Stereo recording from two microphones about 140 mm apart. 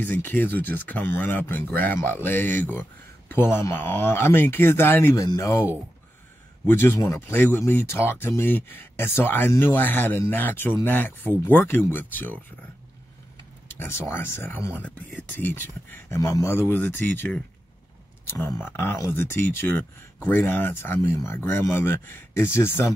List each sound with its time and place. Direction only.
0.0 s speech: 15° left (ahead or behind)
6.7 s speech: 15° left (ahead or behind)
13.4 s speech: 15° left (ahead or behind)